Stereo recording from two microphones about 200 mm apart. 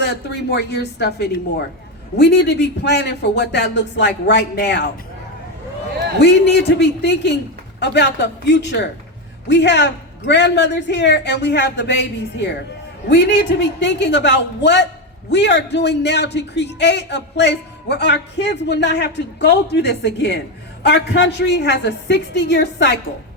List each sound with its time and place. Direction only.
0.0 s a man's voice: 55° left (ahead or behind)
6.1 s a man's voice: 55° left (ahead or behind)